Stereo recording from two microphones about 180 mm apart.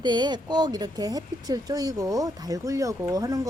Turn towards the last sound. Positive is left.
turn(degrees=-20)  # may be behind; listen again after turning